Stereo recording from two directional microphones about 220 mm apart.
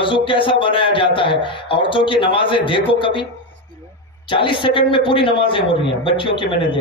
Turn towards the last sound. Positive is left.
turn(degrees=20)  # may be behind; listen again after turning